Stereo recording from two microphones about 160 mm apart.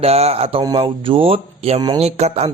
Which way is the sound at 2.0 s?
40° right (ahead or behind).